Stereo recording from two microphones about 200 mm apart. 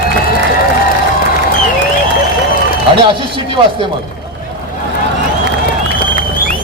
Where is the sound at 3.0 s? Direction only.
25° right (ahead or behind).